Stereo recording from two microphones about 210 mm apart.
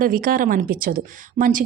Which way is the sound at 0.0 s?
40° right (ahead or behind).